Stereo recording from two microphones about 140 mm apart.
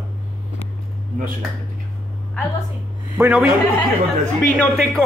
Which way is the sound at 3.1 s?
10° right (ahead or behind).